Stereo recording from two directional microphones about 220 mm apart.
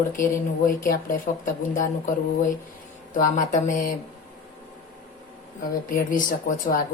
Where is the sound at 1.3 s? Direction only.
35° left (ahead or behind).